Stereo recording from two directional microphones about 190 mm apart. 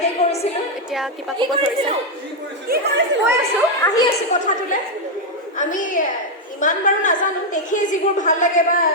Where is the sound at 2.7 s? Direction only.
50° right (ahead or behind).